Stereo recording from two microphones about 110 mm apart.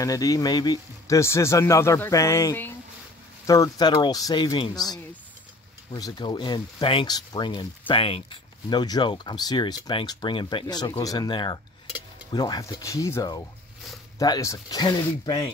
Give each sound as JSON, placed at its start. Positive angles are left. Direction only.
{"t": 0.0, "sound": "a man's voice", "side_deg": 30}
{"t": 7.1, "sound": "speech", "side_deg": 40}
{"t": 7.9, "sound": "speech", "side_deg": 55}
{"t": 14.4, "sound": "a man's voice", "side_deg": 25}
{"t": 14.8, "sound": "speech", "side_deg": 40}